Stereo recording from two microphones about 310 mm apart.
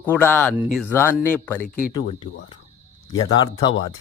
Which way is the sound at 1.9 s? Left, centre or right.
Centre.